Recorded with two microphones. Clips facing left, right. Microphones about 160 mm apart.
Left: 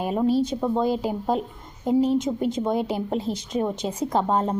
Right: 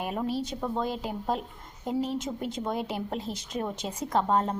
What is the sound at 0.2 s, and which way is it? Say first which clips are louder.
A woman's voice: left 12 dB; centre (ahead or behind).